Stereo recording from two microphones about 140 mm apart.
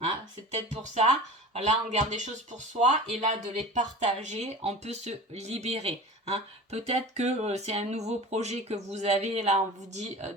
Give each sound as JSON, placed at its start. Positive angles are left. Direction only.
{"t": 0.5, "sound": "speech", "side_deg": -55}